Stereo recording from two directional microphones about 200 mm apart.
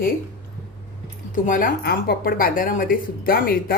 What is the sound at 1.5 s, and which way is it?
A woman's voice, 45° left (ahead or behind).